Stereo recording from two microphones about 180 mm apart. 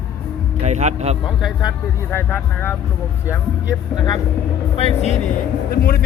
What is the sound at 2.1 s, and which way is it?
Speech, 10° left (ahead or behind).